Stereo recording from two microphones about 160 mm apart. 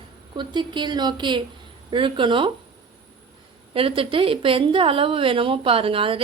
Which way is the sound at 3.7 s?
35° right (ahead or behind).